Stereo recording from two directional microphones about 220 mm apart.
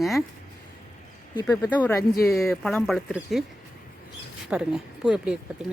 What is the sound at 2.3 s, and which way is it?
Speech, centre (ahead or behind).